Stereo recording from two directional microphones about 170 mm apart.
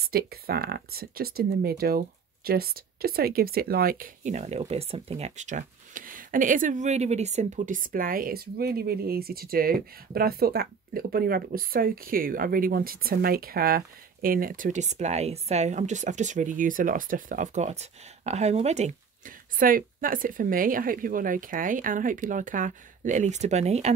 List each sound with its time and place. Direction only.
0.1 s speech: 65° right (ahead or behind); by 23.9 s 40° right (ahead or behind)